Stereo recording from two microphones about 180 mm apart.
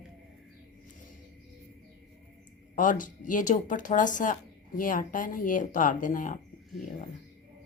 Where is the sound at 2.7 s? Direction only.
45° left (ahead or behind).